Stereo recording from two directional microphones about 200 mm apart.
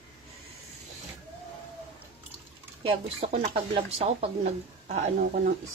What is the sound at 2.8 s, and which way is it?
A woman's voice, 30° right (ahead or behind).